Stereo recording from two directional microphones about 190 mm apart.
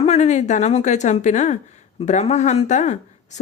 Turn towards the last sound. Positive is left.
turn(degrees=40)  # may be behind; listen again after turning